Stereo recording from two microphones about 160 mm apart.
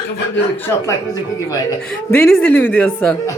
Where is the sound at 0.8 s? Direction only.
20° left (ahead or behind).